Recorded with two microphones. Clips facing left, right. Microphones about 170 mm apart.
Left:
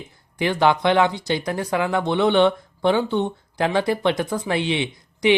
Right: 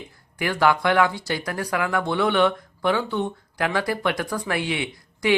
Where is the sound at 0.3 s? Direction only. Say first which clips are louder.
Left 2 dB; 25° left (ahead or behind).